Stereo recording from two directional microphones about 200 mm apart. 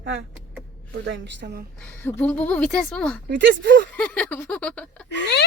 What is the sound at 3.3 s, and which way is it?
Speech, 60° right (ahead or behind).